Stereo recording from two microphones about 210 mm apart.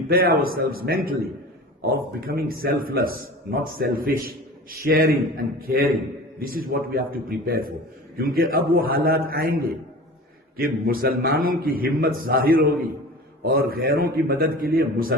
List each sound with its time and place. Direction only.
0.1 s a man's voice: 45° right (ahead or behind)